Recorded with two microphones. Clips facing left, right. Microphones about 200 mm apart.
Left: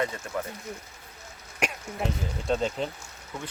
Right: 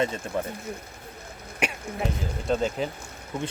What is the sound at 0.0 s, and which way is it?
Speech, 25° right (ahead or behind).